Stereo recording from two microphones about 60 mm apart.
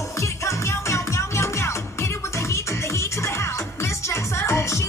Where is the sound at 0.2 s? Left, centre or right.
Left.